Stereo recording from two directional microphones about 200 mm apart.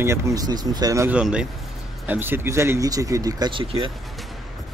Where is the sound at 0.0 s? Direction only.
15° right (ahead or behind).